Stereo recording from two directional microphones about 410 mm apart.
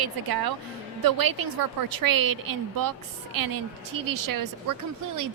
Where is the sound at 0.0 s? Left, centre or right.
Right.